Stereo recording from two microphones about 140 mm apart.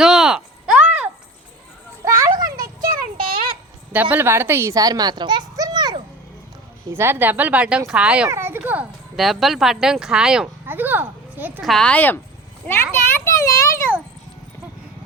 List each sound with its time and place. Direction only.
0.0 s a sound: 5° right (ahead or behind)
2.0 s children playing: 20° right (ahead or behind)
3.2 s a sound: 40° right (ahead or behind)
3.9 s speech: 15° right (ahead or behind); by 6.0 s 30° right (ahead or behind)
6.9 s speech: 15° right (ahead or behind)
11.6 s speech: 5° left (ahead or behind)
12.6 s children playing: 15° left (ahead or behind)